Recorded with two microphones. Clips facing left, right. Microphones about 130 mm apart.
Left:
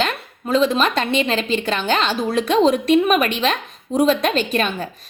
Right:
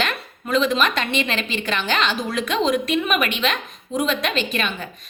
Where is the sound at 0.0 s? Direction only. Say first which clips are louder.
Left 3 dB; 30° left (ahead or behind).